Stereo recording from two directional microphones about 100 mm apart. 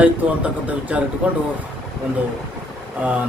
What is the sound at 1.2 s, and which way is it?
Speech, 10° right (ahead or behind).